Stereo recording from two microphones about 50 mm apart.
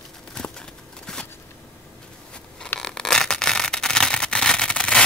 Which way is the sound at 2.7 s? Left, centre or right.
Centre.